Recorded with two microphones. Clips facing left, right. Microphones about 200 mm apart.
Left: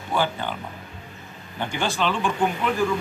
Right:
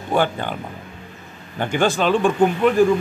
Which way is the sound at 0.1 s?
50° right (ahead or behind).